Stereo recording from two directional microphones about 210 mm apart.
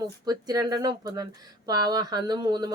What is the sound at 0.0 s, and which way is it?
Speech, 15° right (ahead or behind).